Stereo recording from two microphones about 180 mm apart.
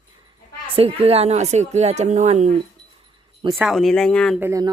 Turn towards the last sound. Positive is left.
turn(degrees=-15)  # may be behind; listen again after turning